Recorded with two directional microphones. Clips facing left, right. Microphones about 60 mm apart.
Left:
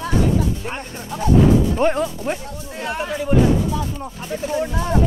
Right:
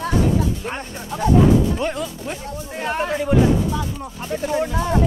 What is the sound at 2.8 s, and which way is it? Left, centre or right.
Speech, right.